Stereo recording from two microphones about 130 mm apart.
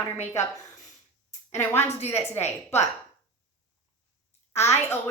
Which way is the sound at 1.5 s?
20° left (ahead or behind).